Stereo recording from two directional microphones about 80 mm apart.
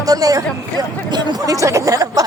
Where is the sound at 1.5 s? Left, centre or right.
Right.